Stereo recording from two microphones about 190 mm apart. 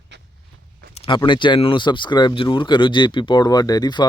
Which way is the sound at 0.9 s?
25° left (ahead or behind).